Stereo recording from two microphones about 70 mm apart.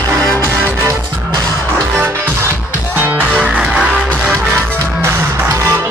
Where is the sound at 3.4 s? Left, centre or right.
Centre.